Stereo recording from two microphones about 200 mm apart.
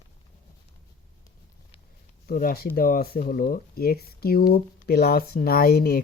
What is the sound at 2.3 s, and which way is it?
Speech, 45° left (ahead or behind).